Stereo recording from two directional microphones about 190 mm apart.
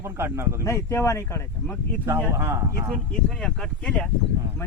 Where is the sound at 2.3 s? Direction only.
10° right (ahead or behind).